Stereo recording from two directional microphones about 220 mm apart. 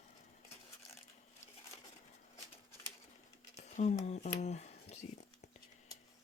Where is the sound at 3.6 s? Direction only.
30° left (ahead or behind).